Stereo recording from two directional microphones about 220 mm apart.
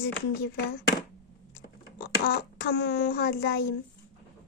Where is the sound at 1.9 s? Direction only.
50° left (ahead or behind).